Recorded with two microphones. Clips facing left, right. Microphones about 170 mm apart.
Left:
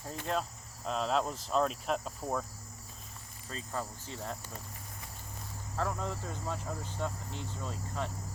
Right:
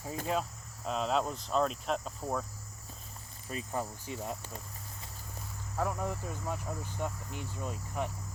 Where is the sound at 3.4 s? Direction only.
15° right (ahead or behind).